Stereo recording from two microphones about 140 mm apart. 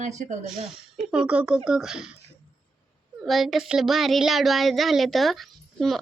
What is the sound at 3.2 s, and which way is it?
A child's voice, centre (ahead or behind).